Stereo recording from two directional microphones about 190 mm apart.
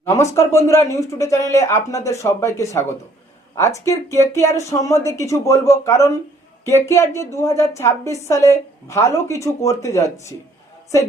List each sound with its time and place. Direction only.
0.0 s a woman's voice: 15° left (ahead or behind)
3.5 s a woman's voice: 15° left (ahead or behind)